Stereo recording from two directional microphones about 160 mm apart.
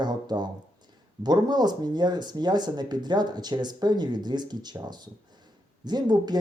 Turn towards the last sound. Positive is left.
turn(degrees=-25)  # may be behind; listen again after turning